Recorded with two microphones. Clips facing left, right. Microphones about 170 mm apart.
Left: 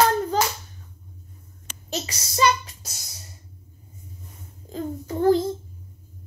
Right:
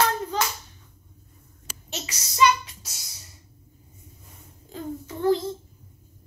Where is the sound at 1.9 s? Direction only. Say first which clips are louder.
Left 6 dB; 35° left (ahead or behind).